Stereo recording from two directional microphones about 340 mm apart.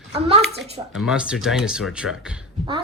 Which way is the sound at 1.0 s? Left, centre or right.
Centre.